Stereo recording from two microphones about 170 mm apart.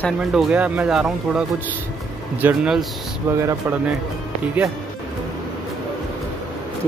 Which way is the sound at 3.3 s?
15° right (ahead or behind).